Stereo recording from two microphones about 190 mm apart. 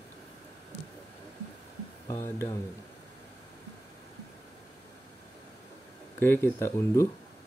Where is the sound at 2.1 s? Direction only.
15° left (ahead or behind).